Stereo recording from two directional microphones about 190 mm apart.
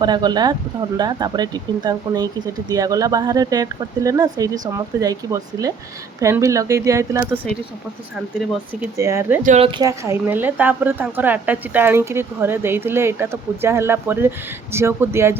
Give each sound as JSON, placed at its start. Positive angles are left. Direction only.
{"t": 0.0, "sound": "a woman's voice", "side_deg": -25}
{"t": 9.0, "sound": "a woman's voice", "side_deg": -15}
{"t": 9.4, "sound": "speech", "side_deg": -40}
{"t": 9.6, "sound": "speech", "side_deg": -25}
{"t": 10.0, "sound": "a woman's voice", "side_deg": -10}